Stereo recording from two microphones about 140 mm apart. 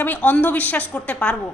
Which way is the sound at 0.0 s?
10° left (ahead or behind).